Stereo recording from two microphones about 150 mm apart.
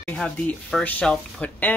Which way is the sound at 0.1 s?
5° left (ahead or behind).